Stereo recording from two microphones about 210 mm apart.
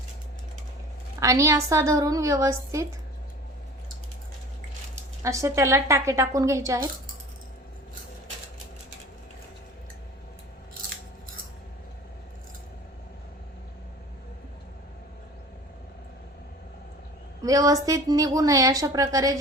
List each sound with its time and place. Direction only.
1.2 s a woman's voice: 15° right (ahead or behind)
5.2 s a woman's voice: 15° right (ahead or behind)
17.4 s a woman's voice: 15° right (ahead or behind)